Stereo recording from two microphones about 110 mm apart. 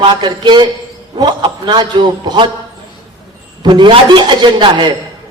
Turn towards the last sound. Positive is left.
turn(degrees=-45)  # may be behind; listen again after turning